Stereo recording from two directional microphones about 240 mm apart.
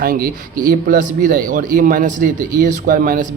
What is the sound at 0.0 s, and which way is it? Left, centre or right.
Speech, right.